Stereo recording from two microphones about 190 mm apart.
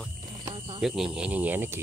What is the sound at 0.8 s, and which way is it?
Speech, centre (ahead or behind).